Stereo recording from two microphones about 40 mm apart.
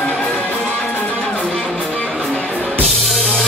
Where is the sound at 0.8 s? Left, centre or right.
Left.